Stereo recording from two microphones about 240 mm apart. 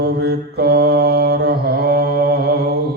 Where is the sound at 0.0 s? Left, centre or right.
Right.